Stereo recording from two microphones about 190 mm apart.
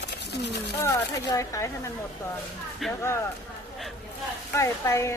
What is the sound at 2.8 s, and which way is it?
Speech, centre (ahead or behind).